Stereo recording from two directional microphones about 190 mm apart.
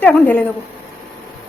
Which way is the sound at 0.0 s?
5° left (ahead or behind).